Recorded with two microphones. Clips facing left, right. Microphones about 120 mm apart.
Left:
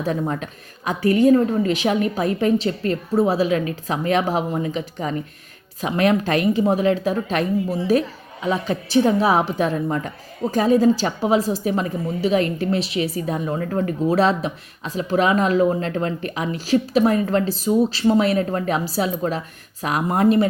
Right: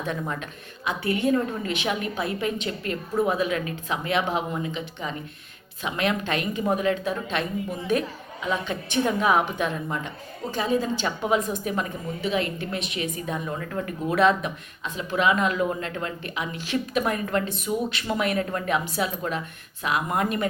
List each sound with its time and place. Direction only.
0.0 s a woman's voice: 35° left (ahead or behind)